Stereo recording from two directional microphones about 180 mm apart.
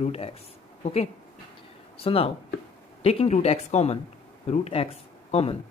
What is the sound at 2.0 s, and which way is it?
Speech, 30° left (ahead or behind).